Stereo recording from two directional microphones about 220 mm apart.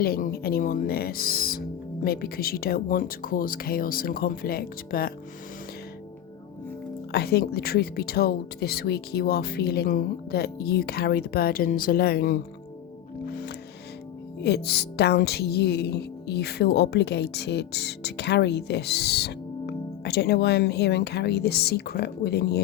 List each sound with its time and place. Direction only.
0.0 s speech: 45° left (ahead or behind)
7.1 s speech: 45° left (ahead or behind)
14.4 s speech: 50° left (ahead or behind)